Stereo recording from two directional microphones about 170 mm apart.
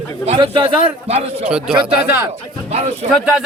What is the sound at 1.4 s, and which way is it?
Speech, 5° right (ahead or behind).